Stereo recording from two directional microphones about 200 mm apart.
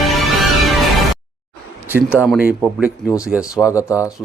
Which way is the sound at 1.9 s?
10° right (ahead or behind).